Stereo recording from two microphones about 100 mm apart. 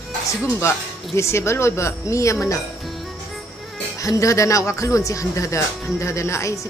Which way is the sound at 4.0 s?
35° left (ahead or behind).